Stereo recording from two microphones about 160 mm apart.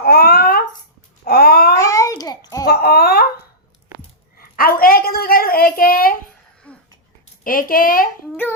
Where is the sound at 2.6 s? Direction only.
75° left (ahead or behind).